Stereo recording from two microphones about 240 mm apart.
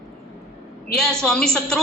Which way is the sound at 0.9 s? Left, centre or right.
Centre.